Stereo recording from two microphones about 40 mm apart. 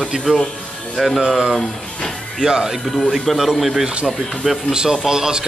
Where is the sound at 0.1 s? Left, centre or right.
Centre.